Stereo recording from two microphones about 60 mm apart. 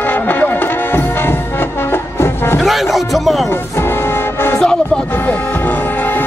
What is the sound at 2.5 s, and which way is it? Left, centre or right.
Music, centre.